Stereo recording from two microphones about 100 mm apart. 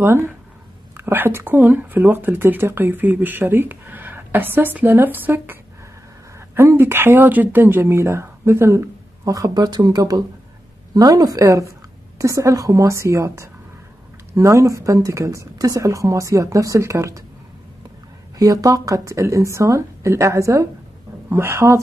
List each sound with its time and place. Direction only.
0.0 s speech: 25° right (ahead or behind)
18.4 s speech: 35° right (ahead or behind)